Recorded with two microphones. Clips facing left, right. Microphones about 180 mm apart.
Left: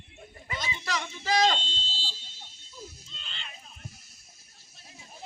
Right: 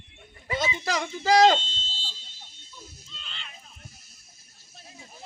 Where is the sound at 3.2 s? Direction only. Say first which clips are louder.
Even; 30° left (ahead or behind).